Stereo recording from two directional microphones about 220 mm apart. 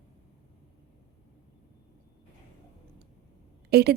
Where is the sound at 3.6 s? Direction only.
45° right (ahead or behind).